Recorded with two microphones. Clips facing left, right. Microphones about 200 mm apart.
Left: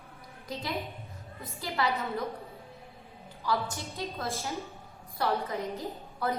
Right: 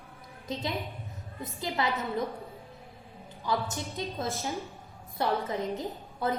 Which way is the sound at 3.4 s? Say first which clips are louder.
Even; 20° right (ahead or behind).